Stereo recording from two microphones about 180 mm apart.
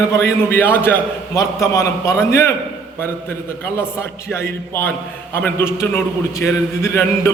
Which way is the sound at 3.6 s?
15° left (ahead or behind).